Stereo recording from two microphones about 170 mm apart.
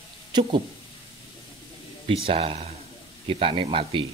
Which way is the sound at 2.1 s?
35° right (ahead or behind).